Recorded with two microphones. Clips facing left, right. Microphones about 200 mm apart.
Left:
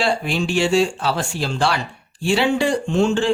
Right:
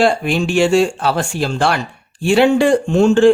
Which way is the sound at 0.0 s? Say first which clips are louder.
Right 6 dB; 50° right (ahead or behind).